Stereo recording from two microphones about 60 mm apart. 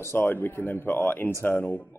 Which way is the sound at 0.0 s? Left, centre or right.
Left.